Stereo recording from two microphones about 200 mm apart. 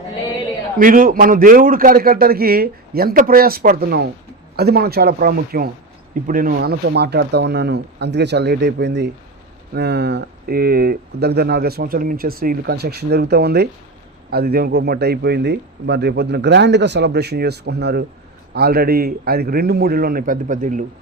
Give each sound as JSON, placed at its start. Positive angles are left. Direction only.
{"t": 0.8, "sound": "a man's voice", "side_deg": -45}